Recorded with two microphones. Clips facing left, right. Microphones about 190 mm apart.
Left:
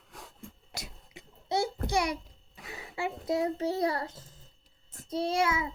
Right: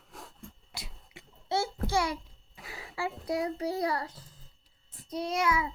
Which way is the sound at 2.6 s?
20° left (ahead or behind).